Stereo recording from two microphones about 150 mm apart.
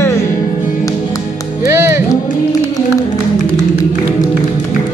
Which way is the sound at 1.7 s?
15° right (ahead or behind).